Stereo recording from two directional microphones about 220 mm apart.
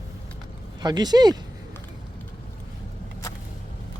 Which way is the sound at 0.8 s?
20° right (ahead or behind).